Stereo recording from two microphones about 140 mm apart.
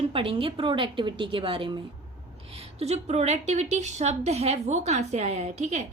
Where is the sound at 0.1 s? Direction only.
40° right (ahead or behind).